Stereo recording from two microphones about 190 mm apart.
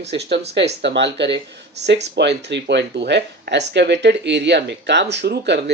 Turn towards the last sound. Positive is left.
turn(degrees=-65)  # may be behind; listen again after turning